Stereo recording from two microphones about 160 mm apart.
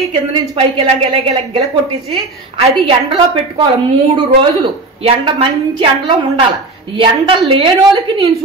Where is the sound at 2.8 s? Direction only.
35° right (ahead or behind).